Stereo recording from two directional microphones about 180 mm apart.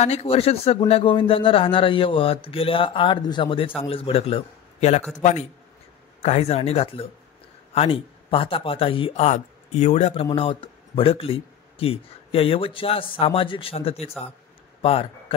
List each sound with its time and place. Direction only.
0.0 s a man's voice: 35° left (ahead or behind)